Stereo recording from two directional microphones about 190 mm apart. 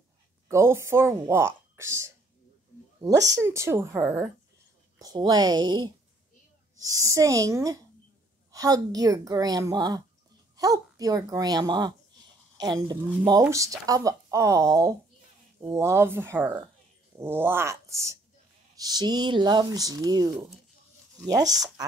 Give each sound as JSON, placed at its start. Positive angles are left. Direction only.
{"t": 0.5, "sound": "a woman's voice", "side_deg": -15}
{"t": 21.3, "sound": "a woman's voice", "side_deg": -20}